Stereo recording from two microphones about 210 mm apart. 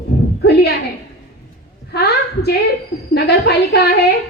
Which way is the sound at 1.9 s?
50° left (ahead or behind).